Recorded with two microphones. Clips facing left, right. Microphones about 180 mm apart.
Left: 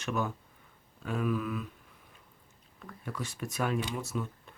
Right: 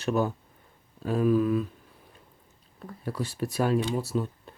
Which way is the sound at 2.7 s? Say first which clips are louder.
Right 6 dB; 35° right (ahead or behind).